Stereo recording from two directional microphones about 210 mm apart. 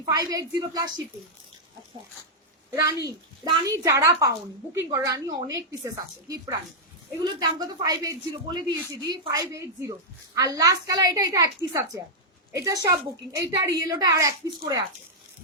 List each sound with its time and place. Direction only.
0.2 s a woman's voice: 15° right (ahead or behind)
2.8 s a woman's voice: 15° right (ahead or behind)